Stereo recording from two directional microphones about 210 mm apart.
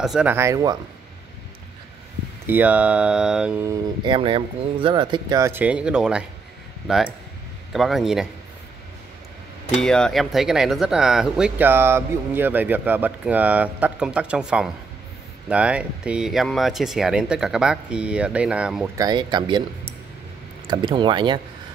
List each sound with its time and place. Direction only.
0.0 s speech: 5° right (ahead or behind)
2.4 s speech: 10° right (ahead or behind)
4.0 s speech: 25° right (ahead or behind); by 8.3 s centre (ahead or behind)
9.8 s speech: 5° left (ahead or behind)
18.9 s speech: 20° right (ahead or behind)
20.6 s speech: 20° right (ahead or behind)